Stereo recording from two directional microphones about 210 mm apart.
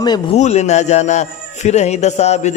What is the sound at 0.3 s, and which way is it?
A man's voice, 30° left (ahead or behind).